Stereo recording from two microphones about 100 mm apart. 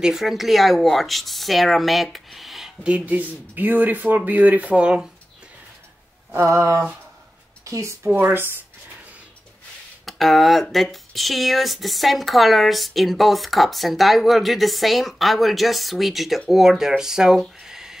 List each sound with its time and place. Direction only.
0.0 s speech: 5° right (ahead or behind)
2.1 s a sound: centre (ahead or behind)
3.1 s speech: 15° right (ahead or behind)
6.3 s speech: 30° right (ahead or behind)
10.0 s speech: centre (ahead or behind)